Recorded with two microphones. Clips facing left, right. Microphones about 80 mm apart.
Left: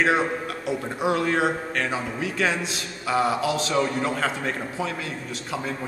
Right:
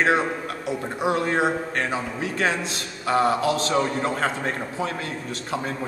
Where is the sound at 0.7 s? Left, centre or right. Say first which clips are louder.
Even; right.